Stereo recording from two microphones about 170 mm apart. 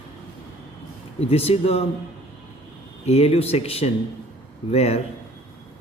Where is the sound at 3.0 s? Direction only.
40° left (ahead or behind).